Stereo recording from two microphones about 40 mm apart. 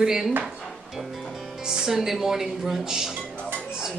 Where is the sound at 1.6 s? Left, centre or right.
Centre.